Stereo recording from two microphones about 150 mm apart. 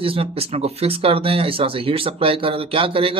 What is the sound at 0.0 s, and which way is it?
Speech, 40° right (ahead or behind).